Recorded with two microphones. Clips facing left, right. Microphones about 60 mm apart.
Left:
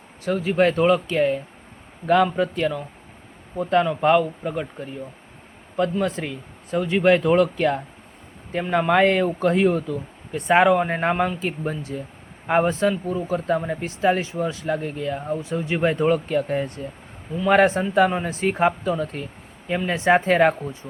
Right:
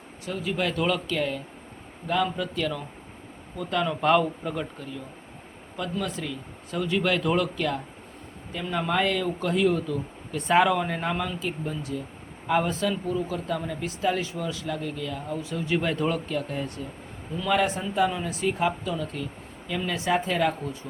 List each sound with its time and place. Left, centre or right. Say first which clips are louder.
0.3 s speech: left 9 dB; left
2.0 s a woman's voice: left 8 dB; left
2.3 s speech: left 6 dB; left
3.8 s a man's voice: left 4 dB; centre
4.8 s speech: left 4 dB; left
6.7 s speech: left 7 dB; left
17.5 s speech: left 8 dB; left
20.1 s a woman's voice: left 8 dB; left